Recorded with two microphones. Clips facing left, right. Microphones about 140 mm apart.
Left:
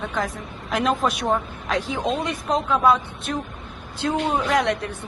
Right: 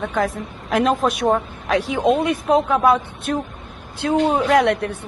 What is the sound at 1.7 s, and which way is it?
Speech, 60° right (ahead or behind).